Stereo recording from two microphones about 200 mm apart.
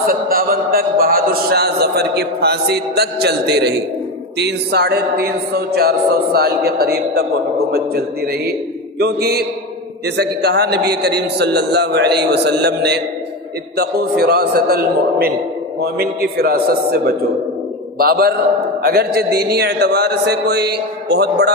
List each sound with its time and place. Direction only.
0.3 s a man's voice: 45° right (ahead or behind)